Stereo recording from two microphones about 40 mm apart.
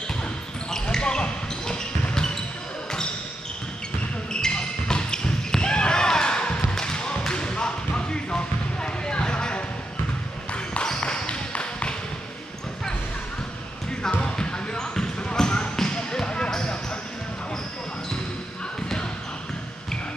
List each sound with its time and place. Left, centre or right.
0.2 s basketball bounce: centre
4.3 s basketball bounce: left
6.7 s a sound: centre
10.5 s basketball bounce: left
11.0 s a sound: left
14.2 s basketball bounce: left